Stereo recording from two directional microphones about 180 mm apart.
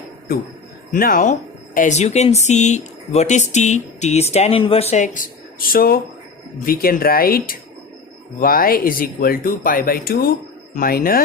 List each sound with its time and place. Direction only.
0.9 s speech: 50° left (ahead or behind)